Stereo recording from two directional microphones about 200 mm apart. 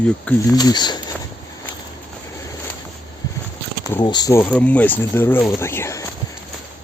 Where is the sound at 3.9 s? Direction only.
20° left (ahead or behind).